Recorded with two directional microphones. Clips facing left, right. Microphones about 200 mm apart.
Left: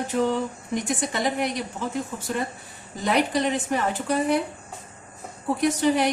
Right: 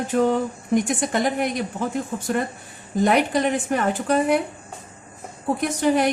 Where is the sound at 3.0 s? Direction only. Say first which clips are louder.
Right 2 dB; 50° right (ahead or behind).